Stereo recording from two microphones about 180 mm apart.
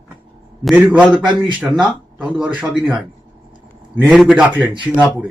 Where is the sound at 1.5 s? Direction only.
10° right (ahead or behind).